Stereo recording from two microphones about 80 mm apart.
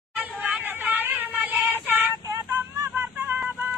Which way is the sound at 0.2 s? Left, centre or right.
Right.